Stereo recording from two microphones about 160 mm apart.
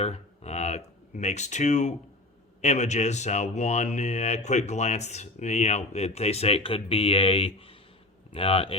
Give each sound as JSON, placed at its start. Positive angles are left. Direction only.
{"t": 0.0, "sound": "speech", "side_deg": 40}